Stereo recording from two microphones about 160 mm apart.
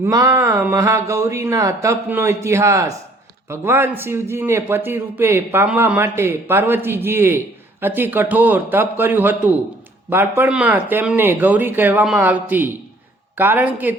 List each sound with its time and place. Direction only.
0.0 s a man's voice: 20° right (ahead or behind)